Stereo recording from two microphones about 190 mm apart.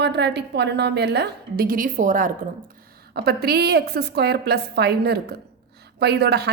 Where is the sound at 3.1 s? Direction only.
55° right (ahead or behind).